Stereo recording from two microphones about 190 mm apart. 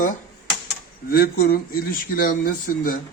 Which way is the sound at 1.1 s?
55° left (ahead or behind).